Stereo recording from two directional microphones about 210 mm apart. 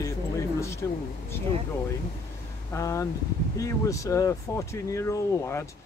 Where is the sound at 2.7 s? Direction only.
15° left (ahead or behind).